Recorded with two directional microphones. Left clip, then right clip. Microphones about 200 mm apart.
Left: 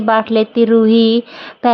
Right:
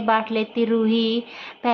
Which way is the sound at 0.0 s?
40° left (ahead or behind).